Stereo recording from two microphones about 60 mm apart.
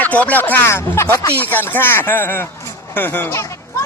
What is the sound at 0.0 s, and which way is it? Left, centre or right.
Speech, left.